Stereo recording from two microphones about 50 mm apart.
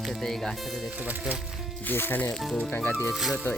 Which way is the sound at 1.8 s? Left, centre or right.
Left.